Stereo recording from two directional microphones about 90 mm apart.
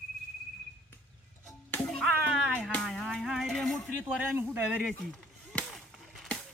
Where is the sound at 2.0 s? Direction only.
10° right (ahead or behind).